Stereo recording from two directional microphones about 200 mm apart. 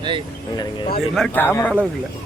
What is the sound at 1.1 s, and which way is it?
Speech, 5° left (ahead or behind).